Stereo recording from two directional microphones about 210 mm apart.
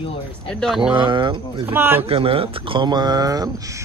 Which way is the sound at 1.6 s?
10° right (ahead or behind).